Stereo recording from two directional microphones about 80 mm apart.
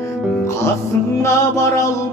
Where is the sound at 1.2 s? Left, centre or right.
Left.